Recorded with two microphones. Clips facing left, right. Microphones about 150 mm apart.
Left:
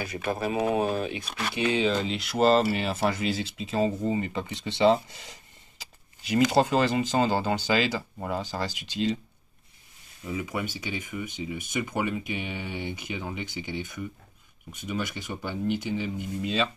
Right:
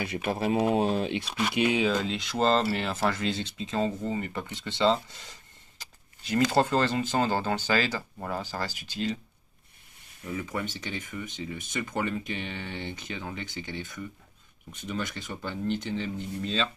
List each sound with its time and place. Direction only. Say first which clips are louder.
0.7 s speech: right 1 dB; 25° right (ahead or behind)
1.4 s speech: right 1 dB; 15° right (ahead or behind)
2.0 s speech: left 3 dB; 5° left (ahead or behind)
2.7 s speech: left 1 dB; 15° left (ahead or behind)
10.3 s speech: left 1 dB; 10° left (ahead or behind)